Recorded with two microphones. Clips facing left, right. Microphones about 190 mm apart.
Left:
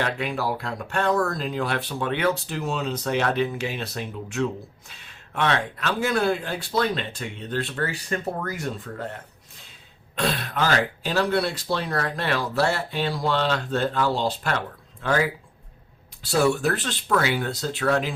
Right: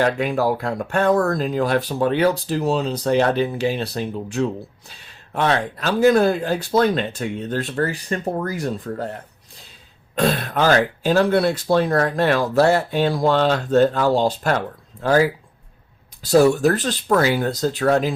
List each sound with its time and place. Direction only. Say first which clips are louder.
0.0 s speech: right 7 dB; 45° right (ahead or behind)
10.2 s speech: right 6 dB; 45° right (ahead or behind)